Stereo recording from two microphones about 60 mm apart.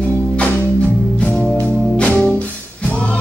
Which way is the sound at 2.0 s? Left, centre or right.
Centre.